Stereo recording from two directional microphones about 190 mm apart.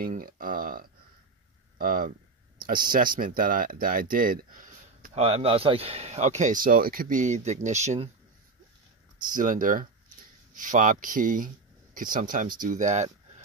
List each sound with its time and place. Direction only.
0.0 s speech: 50° right (ahead or behind)
9.2 s speech: 45° right (ahead or behind)